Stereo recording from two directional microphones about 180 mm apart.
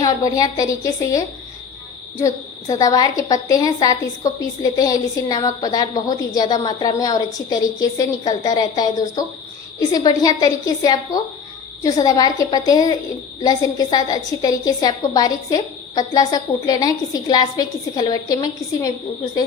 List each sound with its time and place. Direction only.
0.0 s a woman's voice: 20° left (ahead or behind)